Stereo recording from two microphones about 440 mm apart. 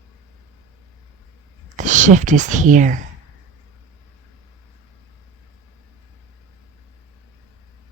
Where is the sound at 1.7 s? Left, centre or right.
Centre.